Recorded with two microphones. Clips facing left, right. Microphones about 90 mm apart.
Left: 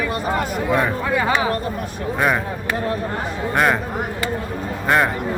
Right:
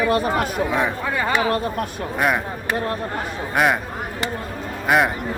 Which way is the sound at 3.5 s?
5° right (ahead or behind).